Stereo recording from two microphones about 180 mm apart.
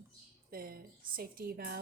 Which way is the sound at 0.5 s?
55° right (ahead or behind).